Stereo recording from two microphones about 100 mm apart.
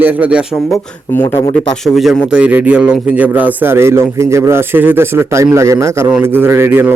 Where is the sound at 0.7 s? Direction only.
25° left (ahead or behind).